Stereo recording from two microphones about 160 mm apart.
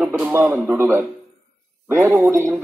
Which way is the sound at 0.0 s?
10° right (ahead or behind).